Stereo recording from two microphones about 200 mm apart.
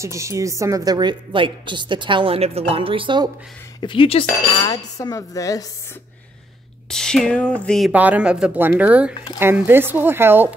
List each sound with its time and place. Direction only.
0.0 s a woman's voice: 15° right (ahead or behind)
3.8 s speech: 25° left (ahead or behind)
6.9 s speech: 5° left (ahead or behind)
7.9 s speech: 5° right (ahead or behind)